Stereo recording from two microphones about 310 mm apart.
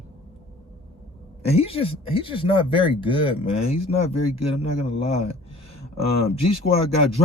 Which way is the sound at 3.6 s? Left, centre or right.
Left.